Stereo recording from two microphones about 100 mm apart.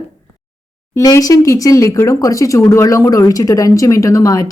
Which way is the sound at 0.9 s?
35° left (ahead or behind).